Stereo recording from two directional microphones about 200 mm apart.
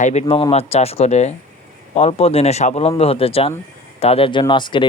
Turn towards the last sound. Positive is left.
turn(degrees=25)  # may be behind; listen again after turning